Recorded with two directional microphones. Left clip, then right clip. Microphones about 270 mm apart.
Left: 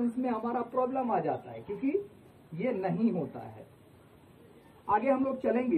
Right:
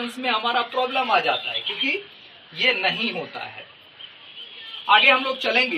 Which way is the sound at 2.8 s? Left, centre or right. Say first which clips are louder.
Right 9 dB; right.